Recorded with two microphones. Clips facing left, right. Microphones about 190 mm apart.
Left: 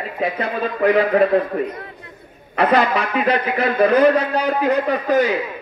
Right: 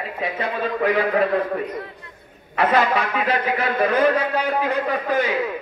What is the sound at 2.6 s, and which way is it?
A man's voice, 35° left (ahead or behind).